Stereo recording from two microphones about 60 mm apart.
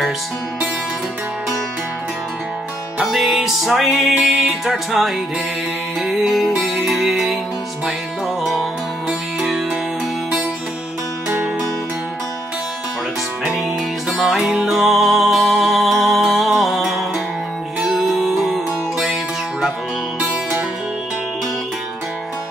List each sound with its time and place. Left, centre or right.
3.0 s music: centre
9.4 s music: centre
11.2 s music: right
13.5 s music: centre